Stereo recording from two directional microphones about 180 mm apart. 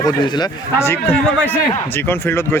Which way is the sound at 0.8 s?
15° left (ahead or behind).